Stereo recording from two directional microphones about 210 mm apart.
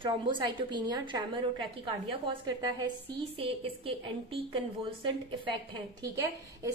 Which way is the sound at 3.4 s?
25° right (ahead or behind).